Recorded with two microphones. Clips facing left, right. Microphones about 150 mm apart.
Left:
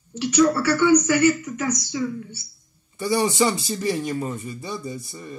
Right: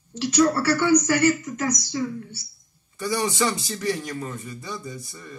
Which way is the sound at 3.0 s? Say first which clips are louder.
Left 4 dB; 25° left (ahead or behind).